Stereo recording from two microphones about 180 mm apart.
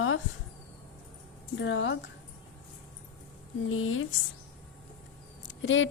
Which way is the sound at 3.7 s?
90° left.